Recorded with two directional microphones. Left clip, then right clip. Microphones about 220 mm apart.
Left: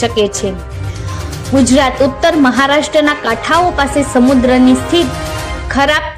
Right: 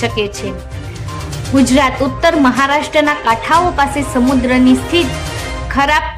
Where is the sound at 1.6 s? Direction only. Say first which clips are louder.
Left 3 dB; 15° left (ahead or behind).